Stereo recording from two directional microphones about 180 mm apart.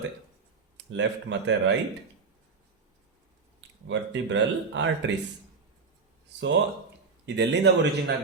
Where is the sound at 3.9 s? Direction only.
90° right.